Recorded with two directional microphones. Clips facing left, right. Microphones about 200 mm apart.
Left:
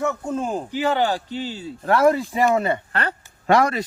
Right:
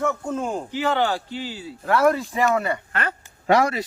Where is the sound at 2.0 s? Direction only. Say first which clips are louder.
Left 2 dB; 15° left (ahead or behind); by 3.2 s 35° left (ahead or behind).